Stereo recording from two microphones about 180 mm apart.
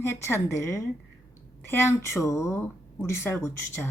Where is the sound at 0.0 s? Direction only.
15° left (ahead or behind).